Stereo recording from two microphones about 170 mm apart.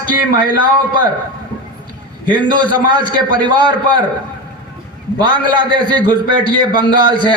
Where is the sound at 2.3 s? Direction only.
25° right (ahead or behind).